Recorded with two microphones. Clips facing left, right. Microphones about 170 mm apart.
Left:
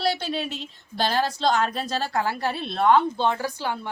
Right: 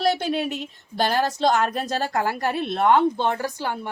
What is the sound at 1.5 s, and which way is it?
A woman's voice, 50° right (ahead or behind).